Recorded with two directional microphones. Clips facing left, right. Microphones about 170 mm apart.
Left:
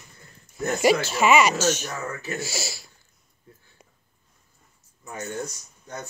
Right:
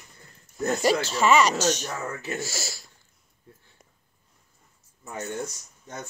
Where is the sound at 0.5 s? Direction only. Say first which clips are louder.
Left 2 dB; 10° left (ahead or behind).